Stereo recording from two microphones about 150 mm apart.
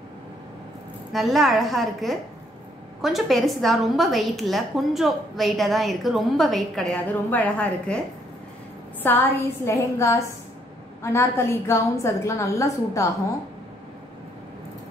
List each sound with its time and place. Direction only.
1.1 s a woman's voice: centre (ahead or behind)
9.0 s a woman's voice: 10° left (ahead or behind)